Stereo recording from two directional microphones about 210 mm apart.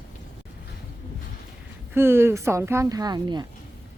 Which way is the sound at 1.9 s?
10° right (ahead or behind).